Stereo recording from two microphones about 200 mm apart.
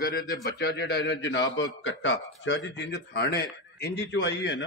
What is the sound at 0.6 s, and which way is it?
A man's voice, 50° left (ahead or behind).